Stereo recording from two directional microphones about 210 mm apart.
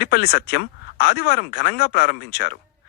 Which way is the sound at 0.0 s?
50° left (ahead or behind).